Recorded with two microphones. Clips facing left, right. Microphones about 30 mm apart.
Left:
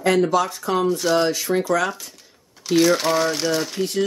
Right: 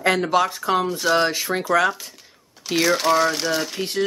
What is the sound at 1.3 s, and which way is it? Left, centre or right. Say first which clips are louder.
Speech: even; centre.